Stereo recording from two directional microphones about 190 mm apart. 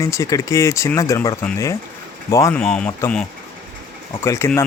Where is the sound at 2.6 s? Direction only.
5° left (ahead or behind).